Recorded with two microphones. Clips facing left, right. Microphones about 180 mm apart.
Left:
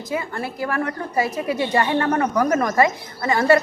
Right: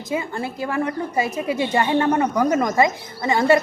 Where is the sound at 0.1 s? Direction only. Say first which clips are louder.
Right 1 dB; 20° right (ahead or behind).